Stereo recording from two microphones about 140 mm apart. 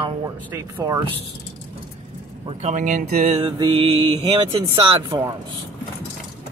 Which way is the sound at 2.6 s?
65° right (ahead or behind).